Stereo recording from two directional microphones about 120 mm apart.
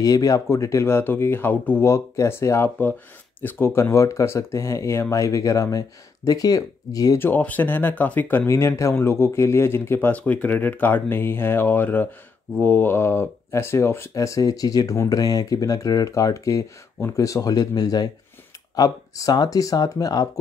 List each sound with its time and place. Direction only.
0.0 s speech: 30° left (ahead or behind)
7.2 s speech: 15° left (ahead or behind); by 20.2 s 30° left (ahead or behind)